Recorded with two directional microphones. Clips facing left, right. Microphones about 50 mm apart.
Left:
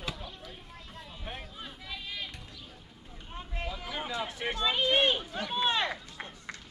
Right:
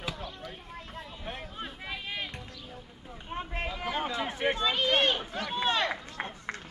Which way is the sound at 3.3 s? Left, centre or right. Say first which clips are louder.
Right 4 dB; right.